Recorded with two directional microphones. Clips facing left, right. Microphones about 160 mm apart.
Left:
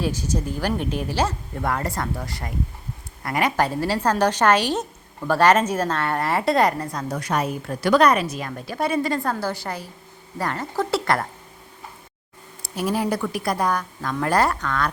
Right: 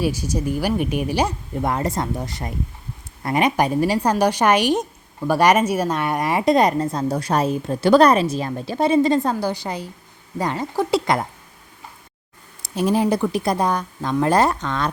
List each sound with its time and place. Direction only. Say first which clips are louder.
0.0 s a woman's voice: right 3 dB; 10° right (ahead or behind)
12.6 s a woman's voice: right 5 dB; 20° right (ahead or behind)